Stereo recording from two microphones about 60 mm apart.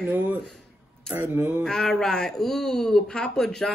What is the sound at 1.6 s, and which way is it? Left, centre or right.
Speech, centre.